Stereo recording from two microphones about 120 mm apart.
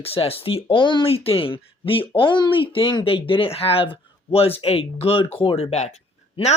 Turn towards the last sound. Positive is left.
turn(degrees=65)  # may be behind; listen again after turning